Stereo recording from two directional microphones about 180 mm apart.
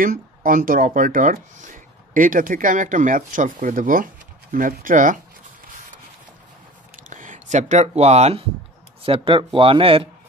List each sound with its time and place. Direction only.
0.0 s speech: 50° right (ahead or behind)
7.1 s speech: 45° right (ahead or behind)